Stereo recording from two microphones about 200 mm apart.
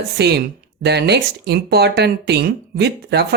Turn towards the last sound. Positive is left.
turn(degrees=-55)  # may be behind; listen again after turning